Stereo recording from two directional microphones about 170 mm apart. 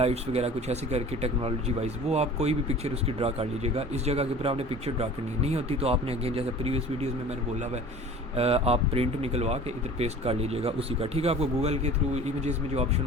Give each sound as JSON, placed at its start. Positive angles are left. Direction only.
{"t": 0.0, "sound": "speech", "side_deg": -40}
{"t": 8.4, "sound": "speech", "side_deg": -35}